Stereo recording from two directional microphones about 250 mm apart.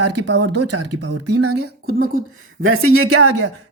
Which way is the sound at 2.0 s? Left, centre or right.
Right.